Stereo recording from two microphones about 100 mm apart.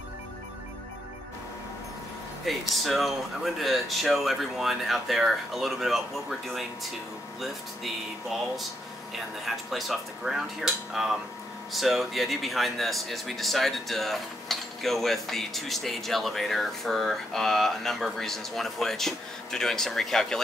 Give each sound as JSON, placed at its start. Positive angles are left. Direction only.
{"t": 2.7, "sound": "speech", "side_deg": 0}
{"t": 7.3, "sound": "speech", "side_deg": 0}